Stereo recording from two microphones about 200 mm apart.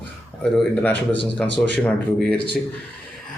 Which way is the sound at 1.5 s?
60° right (ahead or behind).